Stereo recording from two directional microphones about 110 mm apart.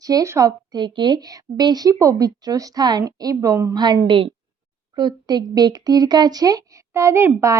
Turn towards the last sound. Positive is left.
turn(degrees=-25)  # may be behind; listen again after turning